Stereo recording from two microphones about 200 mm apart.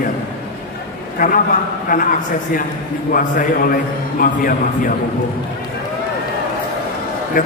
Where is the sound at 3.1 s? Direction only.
45° left (ahead or behind).